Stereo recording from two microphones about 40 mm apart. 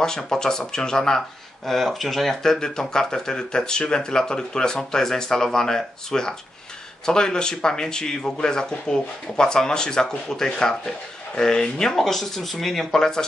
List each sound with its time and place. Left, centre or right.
0.0 s speech: centre
1.7 s speech: centre
11.9 s speech: centre